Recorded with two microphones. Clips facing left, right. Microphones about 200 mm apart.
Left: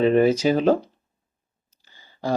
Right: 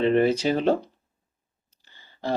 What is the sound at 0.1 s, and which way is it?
Speech, 10° left (ahead or behind).